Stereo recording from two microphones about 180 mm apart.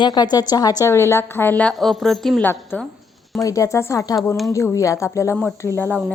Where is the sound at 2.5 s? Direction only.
10° left (ahead or behind).